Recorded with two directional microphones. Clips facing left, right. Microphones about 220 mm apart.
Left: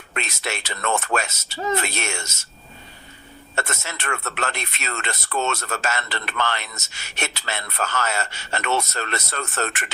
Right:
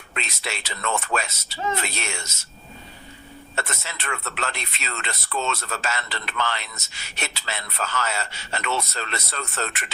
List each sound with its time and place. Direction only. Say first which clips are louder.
0.1 s a man's voice: left 3 dB; 50° left (ahead or behind)
3.5 s a man's voice: left 3 dB; 50° left (ahead or behind)